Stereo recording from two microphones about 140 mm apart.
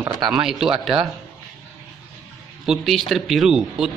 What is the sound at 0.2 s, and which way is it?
Speech, 5° right (ahead or behind).